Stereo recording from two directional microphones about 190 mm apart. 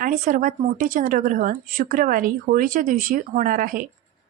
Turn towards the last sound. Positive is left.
turn(degrees=-45)  # may be behind; listen again after turning